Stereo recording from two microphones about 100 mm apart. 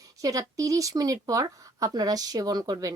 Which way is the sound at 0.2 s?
35° right (ahead or behind).